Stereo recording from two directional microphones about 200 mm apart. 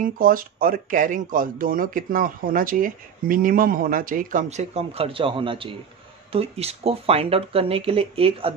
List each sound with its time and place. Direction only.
0.0 s speech: 45° right (ahead or behind); by 8.5 s 30° right (ahead or behind)